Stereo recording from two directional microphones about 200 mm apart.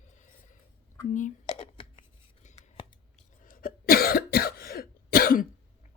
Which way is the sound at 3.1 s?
40° left (ahead or behind).